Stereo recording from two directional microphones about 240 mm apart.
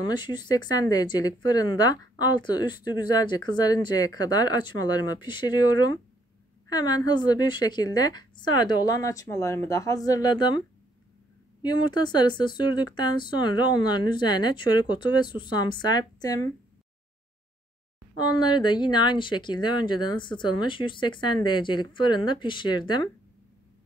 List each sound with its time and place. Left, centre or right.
0.0 s speech: centre
11.6 s speech: centre
18.1 s speech: centre